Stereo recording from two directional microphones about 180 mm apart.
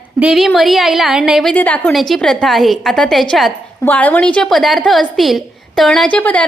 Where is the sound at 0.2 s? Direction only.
5° right (ahead or behind).